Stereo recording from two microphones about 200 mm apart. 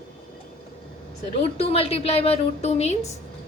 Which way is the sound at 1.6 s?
30° left (ahead or behind).